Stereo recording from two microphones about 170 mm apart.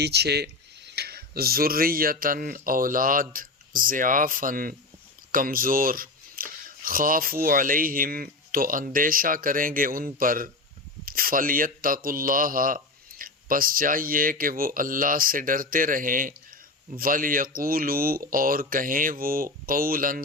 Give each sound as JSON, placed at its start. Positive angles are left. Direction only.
{"t": 0.0, "sound": "speech", "side_deg": -75}